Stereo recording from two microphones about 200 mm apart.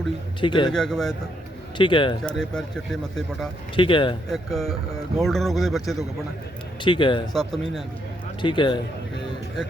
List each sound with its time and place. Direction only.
0.3 s a man's voice: 25° left (ahead or behind)
0.7 s speech: centre (ahead or behind)
1.8 s a man's voice: 25° left (ahead or behind)
2.2 s speech: 5° left (ahead or behind)
3.8 s a man's voice: 25° left (ahead or behind)
4.3 s speech: centre (ahead or behind)
6.8 s a man's voice: 25° left (ahead or behind)
7.3 s speech: centre (ahead or behind)
8.4 s a man's voice: 25° left (ahead or behind)